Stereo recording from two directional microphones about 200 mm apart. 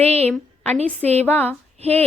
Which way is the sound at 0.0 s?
30° right (ahead or behind).